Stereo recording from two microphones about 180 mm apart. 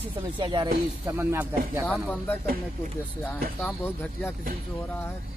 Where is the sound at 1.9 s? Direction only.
10° left (ahead or behind).